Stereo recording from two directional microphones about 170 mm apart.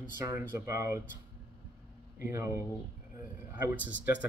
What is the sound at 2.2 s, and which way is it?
Speech, 15° right (ahead or behind).